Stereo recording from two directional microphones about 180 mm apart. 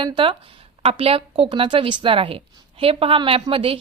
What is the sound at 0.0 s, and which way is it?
Speech, 25° right (ahead or behind).